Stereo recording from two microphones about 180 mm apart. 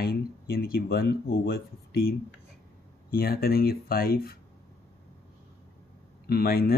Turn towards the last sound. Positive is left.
turn(degrees=60)  # may be behind; listen again after turning